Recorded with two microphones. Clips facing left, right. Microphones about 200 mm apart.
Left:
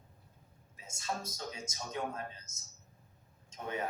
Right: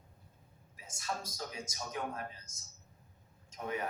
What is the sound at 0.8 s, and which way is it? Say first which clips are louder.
Speech: left 1 dB; 25° left (ahead or behind).